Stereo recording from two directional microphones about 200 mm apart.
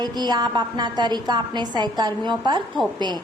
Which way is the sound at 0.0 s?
20° right (ahead or behind).